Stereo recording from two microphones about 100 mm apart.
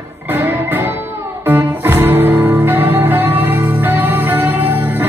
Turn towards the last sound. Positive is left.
turn(degrees=-20)  # may be behind; listen again after turning